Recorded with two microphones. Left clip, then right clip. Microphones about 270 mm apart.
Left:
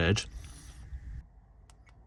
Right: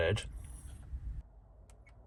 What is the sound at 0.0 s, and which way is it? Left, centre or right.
Speech, left.